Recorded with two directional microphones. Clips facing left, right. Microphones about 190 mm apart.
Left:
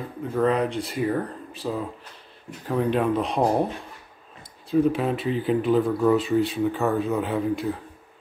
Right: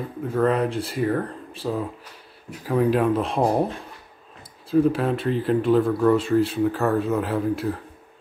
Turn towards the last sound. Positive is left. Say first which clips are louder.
# right 1 dB
turn(degrees=0)  # may be behind; listen again after turning